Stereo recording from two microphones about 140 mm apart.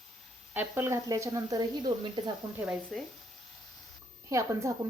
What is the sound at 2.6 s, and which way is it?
Speech, 5° right (ahead or behind).